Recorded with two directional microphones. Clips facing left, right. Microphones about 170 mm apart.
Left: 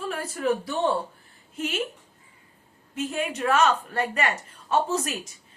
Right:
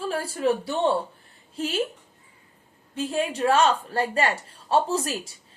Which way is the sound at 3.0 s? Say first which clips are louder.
Right 3 dB; 30° right (ahead or behind).